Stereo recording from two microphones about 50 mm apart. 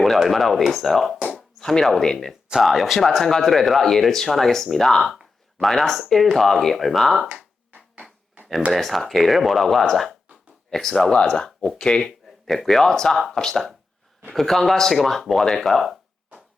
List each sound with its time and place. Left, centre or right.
0.0 s speech: centre
2.5 s speech: centre
8.7 s speech: centre
12.6 s speech: centre